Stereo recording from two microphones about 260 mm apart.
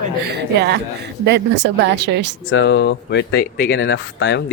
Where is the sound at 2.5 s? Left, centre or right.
Left.